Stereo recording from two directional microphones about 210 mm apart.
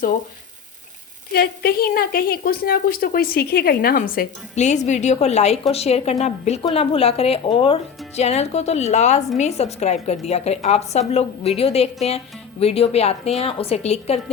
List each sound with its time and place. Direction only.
1.3 s a woman's voice: 50° left (ahead or behind); by 14.2 s 30° left (ahead or behind)